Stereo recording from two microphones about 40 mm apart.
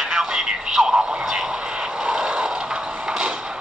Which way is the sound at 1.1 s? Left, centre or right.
Centre.